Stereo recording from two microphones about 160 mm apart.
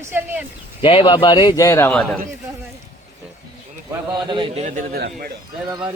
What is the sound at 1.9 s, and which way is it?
Speech, 5° left (ahead or behind).